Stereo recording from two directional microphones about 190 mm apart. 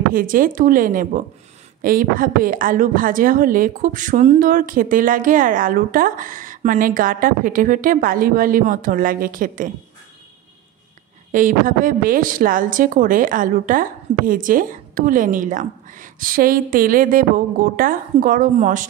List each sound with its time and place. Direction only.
0.1 s speech: 45° right (ahead or behind)
11.3 s speech: 45° right (ahead or behind)